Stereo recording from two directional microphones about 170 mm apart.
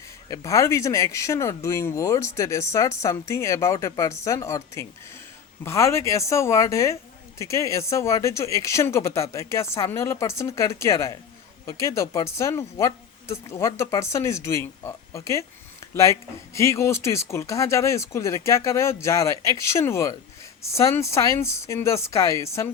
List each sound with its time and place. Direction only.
0.3 s speech: 20° left (ahead or behind)
16.6 s speech: 15° left (ahead or behind)